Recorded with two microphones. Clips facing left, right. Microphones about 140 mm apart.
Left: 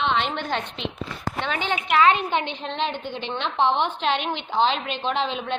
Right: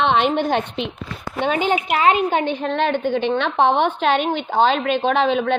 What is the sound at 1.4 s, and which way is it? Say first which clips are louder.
A woman's voice: right 9 dB; 45° right (ahead or behind).